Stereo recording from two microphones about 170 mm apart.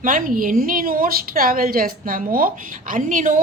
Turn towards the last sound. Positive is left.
turn(degrees=-50)  # may be behind; listen again after turning